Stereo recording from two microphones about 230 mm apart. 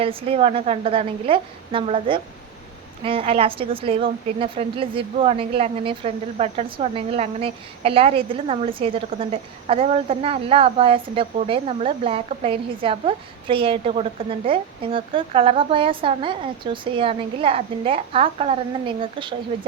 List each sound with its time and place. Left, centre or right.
0.0 s a woman's voice: right